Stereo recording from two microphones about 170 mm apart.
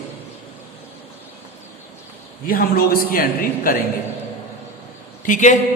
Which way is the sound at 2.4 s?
55° left (ahead or behind).